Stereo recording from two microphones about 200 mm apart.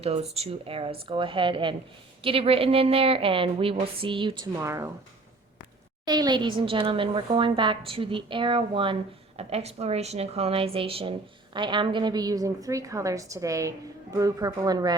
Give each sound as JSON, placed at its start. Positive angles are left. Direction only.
{"t": 0.0, "sound": "a woman's voice", "side_deg": -30}
{"t": 6.1, "sound": "a woman's voice", "side_deg": -20}